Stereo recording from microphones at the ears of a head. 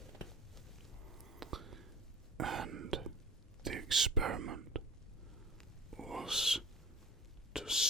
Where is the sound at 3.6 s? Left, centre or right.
Right.